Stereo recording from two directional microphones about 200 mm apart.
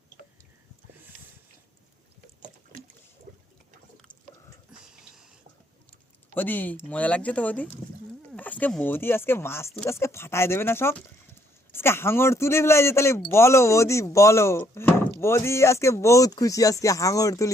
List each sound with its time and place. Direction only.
6.3 s speech: 10° left (ahead or behind)